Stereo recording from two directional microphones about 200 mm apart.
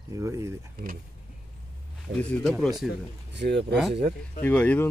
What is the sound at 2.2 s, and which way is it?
Speech, 5° left (ahead or behind).